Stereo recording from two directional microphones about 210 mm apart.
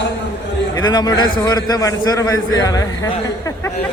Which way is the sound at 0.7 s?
20° left (ahead or behind).